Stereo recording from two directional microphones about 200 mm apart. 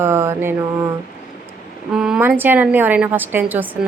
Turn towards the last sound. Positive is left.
turn(degrees=-10)  # may be behind; listen again after turning